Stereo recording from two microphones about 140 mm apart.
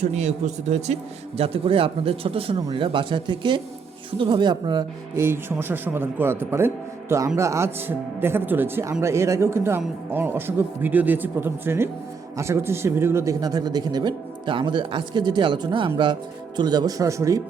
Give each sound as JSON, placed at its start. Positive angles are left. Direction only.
{"t": 0.0, "sound": "speech", "side_deg": -55}
{"t": 1.4, "sound": "speech", "side_deg": -45}
{"t": 5.1, "sound": "speech", "side_deg": -15}